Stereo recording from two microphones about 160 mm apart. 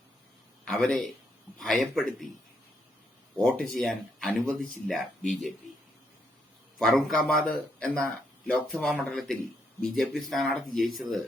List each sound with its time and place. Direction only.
0.6 s a man's voice: centre (ahead or behind)
3.3 s speech: 5° left (ahead or behind)
6.7 s speech: centre (ahead or behind)